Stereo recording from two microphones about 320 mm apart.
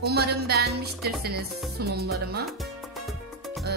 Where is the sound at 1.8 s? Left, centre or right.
Right.